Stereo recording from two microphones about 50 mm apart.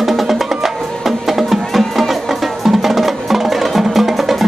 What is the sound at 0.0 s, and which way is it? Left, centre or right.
Music, centre.